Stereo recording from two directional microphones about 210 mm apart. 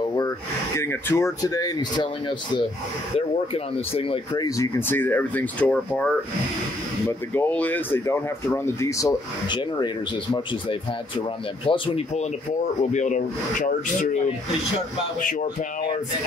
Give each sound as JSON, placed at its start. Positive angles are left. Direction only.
{"t": 0.7, "sound": "speech", "side_deg": 10}
{"t": 11.6, "sound": "speech", "side_deg": 25}
{"t": 12.9, "sound": "speech", "side_deg": 35}